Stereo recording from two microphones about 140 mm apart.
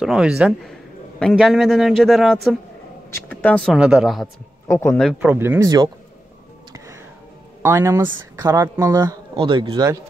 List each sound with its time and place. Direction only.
0.0 s speech: 5° right (ahead or behind)
4.6 s speech: 15° left (ahead or behind)
5.2 s speech: 15° right (ahead or behind)
7.6 s speech: 20° right (ahead or behind); by 9.8 s 35° right (ahead or behind)